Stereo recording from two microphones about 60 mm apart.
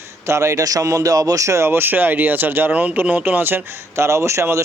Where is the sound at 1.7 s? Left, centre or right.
Right.